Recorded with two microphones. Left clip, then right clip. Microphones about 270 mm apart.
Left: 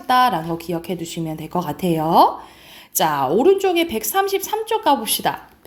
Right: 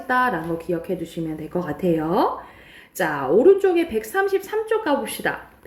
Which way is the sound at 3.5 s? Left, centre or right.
Centre.